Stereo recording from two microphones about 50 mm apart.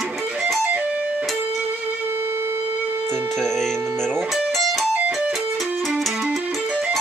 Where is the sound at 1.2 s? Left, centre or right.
Centre.